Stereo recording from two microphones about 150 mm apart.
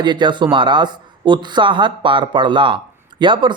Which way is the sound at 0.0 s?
30° right (ahead or behind).